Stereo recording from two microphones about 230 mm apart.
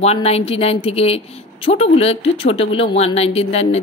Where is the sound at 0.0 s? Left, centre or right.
Left.